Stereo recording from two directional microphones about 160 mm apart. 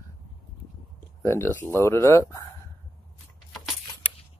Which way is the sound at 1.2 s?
15° left (ahead or behind).